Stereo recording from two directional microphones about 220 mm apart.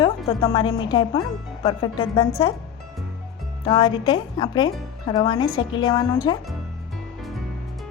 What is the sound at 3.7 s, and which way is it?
Speech, 20° left (ahead or behind).